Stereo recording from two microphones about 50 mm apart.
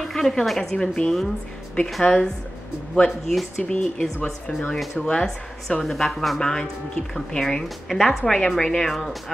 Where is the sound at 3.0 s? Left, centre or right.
Centre.